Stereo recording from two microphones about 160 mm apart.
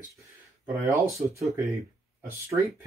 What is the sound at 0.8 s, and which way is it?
Speech, 15° right (ahead or behind).